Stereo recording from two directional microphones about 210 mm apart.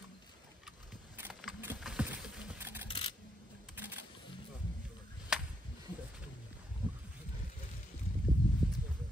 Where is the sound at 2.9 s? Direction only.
25° left (ahead or behind).